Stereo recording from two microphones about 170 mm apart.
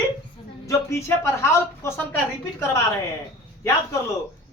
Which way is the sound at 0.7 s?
15° left (ahead or behind).